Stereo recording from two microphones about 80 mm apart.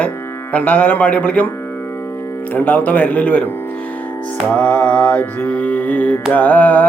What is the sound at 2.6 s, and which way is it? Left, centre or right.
Music, left.